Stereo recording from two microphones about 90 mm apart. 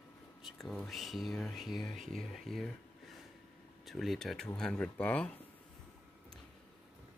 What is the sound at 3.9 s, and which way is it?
Speech, centre (ahead or behind).